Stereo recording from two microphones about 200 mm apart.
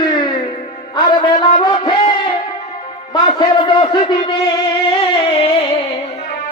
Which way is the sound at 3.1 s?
20° left (ahead or behind).